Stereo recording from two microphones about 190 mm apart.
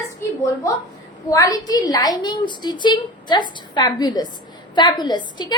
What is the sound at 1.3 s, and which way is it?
A woman's voice, 20° left (ahead or behind).